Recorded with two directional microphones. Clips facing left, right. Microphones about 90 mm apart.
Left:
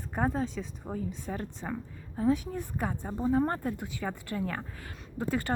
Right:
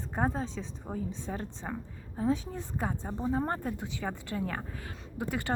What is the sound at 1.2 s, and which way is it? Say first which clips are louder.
A woman's voice: left 1 dB; 25° right (ahead or behind).